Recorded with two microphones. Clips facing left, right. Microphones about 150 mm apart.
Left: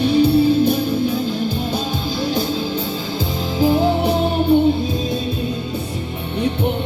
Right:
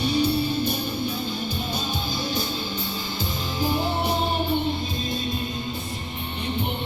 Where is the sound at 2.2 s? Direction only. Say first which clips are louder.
Left 9 dB; 90° left.